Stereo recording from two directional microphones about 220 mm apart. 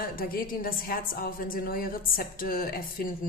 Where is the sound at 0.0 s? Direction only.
40° left (ahead or behind).